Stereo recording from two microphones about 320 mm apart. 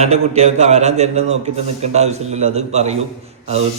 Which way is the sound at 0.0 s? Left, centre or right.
Centre.